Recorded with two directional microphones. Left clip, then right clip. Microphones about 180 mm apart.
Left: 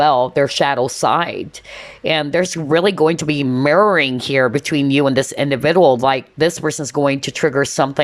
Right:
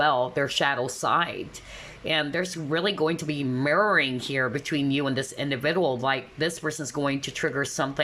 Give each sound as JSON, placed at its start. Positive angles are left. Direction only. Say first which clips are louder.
{"t": 0.0, "sound": "speech", "louder": "left 10 dB", "side_deg": 25}